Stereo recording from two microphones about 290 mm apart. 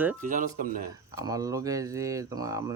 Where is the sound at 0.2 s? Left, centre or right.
Right.